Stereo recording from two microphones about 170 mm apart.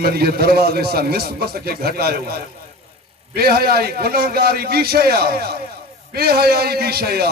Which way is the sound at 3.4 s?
65° right (ahead or behind).